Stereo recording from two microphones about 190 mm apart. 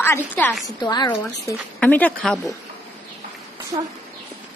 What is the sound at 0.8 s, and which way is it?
Speech, 20° left (ahead or behind).